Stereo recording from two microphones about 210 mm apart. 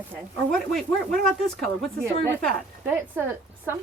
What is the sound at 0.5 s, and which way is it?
Speech, centre (ahead or behind).